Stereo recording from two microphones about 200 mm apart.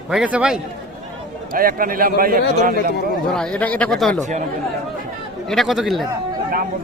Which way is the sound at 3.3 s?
5° left (ahead or behind).